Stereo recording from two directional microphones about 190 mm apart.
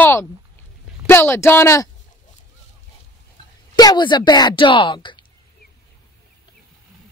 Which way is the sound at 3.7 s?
20° left (ahead or behind).